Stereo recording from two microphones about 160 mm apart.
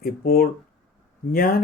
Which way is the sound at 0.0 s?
65° left (ahead or behind).